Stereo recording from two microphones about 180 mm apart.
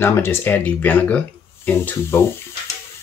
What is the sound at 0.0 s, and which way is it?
Speech, 15° left (ahead or behind).